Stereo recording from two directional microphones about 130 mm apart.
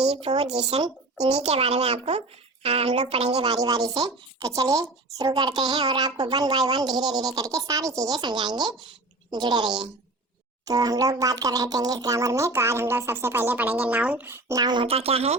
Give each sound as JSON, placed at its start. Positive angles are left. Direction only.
{"t": 0.0, "sound": "speech", "side_deg": -55}
{"t": 3.6, "sound": "a woman's voice", "side_deg": -30}
{"t": 14.6, "sound": "a woman's voice", "side_deg": -35}
{"t": 14.8, "sound": "speech", "side_deg": -50}